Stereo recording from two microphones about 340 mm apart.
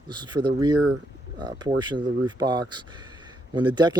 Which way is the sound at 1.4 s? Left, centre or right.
Centre.